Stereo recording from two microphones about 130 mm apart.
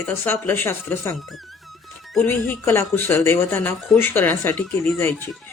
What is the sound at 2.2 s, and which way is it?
Speech, 15° left (ahead or behind).